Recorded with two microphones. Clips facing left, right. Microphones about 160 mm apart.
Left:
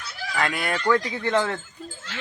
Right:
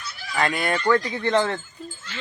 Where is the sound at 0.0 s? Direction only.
90° left.